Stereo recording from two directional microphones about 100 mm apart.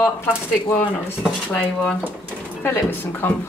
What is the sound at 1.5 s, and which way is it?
A woman's voice, 15° left (ahead or behind).